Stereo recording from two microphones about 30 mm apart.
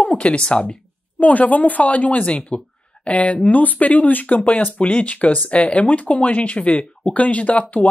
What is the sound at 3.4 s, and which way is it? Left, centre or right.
Speech, left.